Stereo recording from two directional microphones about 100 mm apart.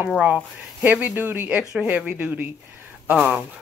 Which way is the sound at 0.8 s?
15° right (ahead or behind).